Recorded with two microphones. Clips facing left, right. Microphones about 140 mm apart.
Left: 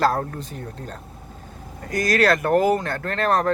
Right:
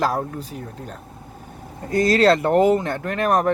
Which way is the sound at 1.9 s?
25° right (ahead or behind).